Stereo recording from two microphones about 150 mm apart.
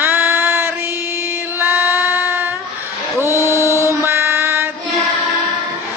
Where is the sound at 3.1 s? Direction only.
20° right (ahead or behind).